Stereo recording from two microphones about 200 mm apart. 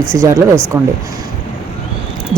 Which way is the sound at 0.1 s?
15° right (ahead or behind).